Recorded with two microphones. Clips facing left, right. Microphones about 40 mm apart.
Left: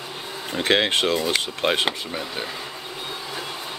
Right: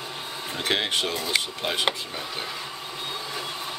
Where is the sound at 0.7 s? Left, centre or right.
Left.